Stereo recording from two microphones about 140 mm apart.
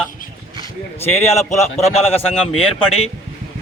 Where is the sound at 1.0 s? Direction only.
20° left (ahead or behind).